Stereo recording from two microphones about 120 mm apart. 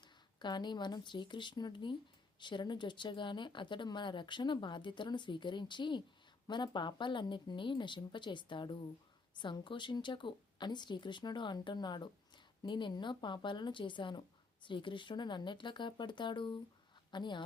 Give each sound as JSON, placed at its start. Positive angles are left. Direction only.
{"t": 0.0, "sound": "a woman's voice", "side_deg": 40}